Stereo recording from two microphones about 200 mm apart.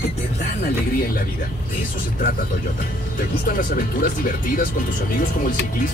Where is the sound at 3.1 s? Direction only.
45° left (ahead or behind).